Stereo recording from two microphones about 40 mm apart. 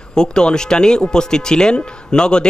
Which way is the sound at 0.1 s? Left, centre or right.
Centre.